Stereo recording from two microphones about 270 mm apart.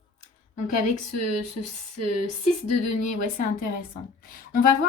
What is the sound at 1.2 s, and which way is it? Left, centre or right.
Speech, left.